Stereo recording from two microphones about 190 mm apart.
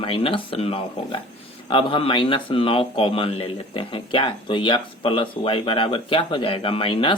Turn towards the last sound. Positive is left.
turn(degrees=30)  # may be behind; listen again after turning